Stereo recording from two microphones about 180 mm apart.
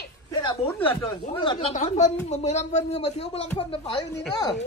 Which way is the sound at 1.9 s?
40° left (ahead or behind).